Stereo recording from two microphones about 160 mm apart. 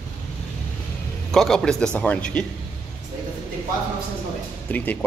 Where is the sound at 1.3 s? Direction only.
Centre (ahead or behind).